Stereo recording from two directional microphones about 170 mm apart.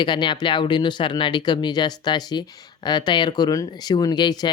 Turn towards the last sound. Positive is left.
turn(degrees=25)  # may be behind; listen again after turning